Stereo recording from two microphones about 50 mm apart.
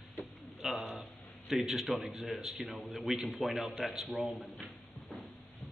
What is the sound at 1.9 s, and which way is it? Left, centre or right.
A man's voice, centre.